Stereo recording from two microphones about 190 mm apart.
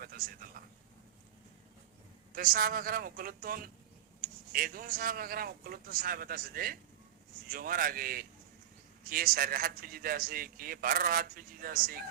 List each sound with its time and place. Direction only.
0.2 s a man's voice: 50° right (ahead or behind)
0.6 s a sound: 50° right (ahead or behind)
2.3 s a man's voice: 50° right (ahead or behind)